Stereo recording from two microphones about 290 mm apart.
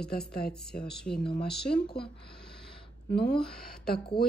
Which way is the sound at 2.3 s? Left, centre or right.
Left.